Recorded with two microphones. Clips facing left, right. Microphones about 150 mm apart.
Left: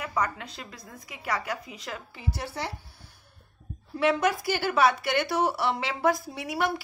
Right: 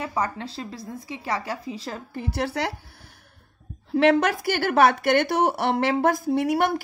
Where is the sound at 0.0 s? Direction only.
30° right (ahead or behind).